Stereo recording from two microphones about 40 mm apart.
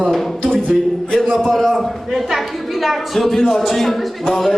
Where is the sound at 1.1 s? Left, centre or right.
Centre.